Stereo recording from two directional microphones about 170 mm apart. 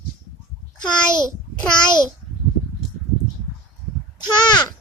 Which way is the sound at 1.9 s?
25° left (ahead or behind).